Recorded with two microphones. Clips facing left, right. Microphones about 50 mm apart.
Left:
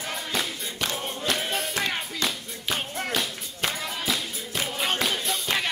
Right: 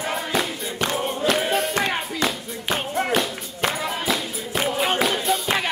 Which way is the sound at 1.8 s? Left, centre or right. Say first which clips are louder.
Right 5 dB; right.